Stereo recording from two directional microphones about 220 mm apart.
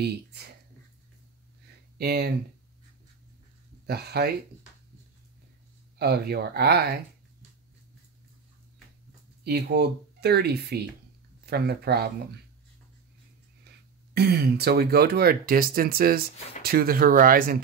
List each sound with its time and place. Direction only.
2.0 s speech: 45° right (ahead or behind)
3.8 s speech: 45° right (ahead or behind)
5.9 s speech: 45° right (ahead or behind)
9.4 s speech: 45° right (ahead or behind)
14.1 s speech: 45° right (ahead or behind)